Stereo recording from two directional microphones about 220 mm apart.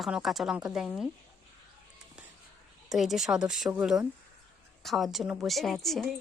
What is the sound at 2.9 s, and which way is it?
A woman's voice, centre (ahead or behind).